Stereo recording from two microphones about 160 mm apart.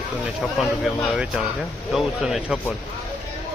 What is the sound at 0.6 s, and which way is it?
Speech, centre (ahead or behind).